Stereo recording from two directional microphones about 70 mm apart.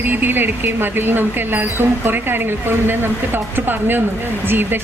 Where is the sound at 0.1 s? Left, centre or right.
Right.